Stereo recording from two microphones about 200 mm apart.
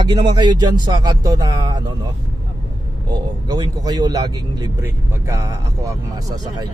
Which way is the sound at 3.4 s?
20° right (ahead or behind).